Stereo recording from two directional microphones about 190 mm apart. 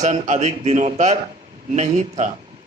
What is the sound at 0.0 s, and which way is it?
A man's voice, 40° right (ahead or behind).